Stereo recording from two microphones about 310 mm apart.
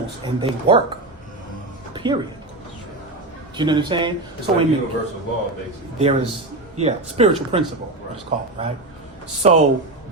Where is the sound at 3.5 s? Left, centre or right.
Centre.